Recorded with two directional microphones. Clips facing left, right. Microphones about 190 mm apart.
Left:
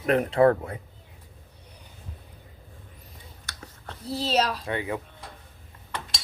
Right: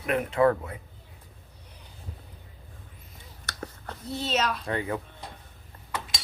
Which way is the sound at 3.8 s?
35° left (ahead or behind).